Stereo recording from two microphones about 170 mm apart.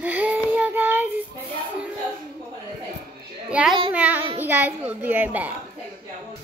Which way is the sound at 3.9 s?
10° right (ahead or behind).